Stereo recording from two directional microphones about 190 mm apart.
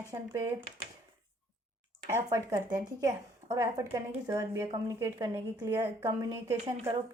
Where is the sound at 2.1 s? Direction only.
15° right (ahead or behind).